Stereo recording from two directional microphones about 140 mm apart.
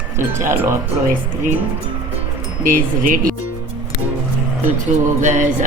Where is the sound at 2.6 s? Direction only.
75° right (ahead or behind).